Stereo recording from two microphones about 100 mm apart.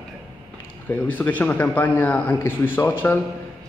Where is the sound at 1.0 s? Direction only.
15° left (ahead or behind).